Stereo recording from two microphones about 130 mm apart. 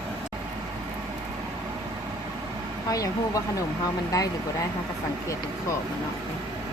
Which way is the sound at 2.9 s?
25° left (ahead or behind).